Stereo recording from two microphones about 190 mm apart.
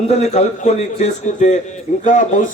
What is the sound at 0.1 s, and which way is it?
A man's voice, 35° left (ahead or behind).